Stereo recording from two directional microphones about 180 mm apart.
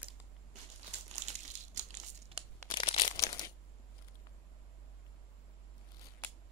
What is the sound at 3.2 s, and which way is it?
Crushing, 20° left (ahead or behind).